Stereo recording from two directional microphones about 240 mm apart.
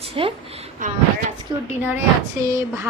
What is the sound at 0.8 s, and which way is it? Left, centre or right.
Speech, right.